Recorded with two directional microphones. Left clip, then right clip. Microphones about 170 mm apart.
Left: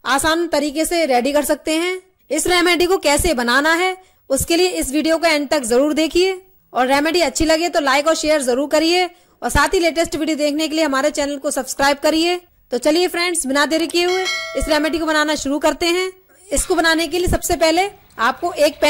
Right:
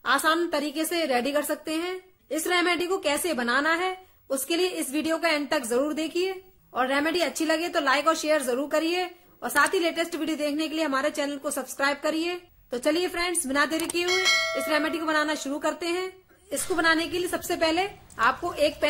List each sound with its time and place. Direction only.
0.0 s a woman's voice: 45° left (ahead or behind)
14.0 s bell: centre (ahead or behind)
14.7 s a woman's voice: 45° left (ahead or behind)